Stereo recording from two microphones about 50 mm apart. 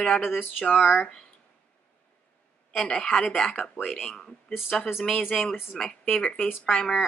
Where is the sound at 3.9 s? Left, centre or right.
Centre.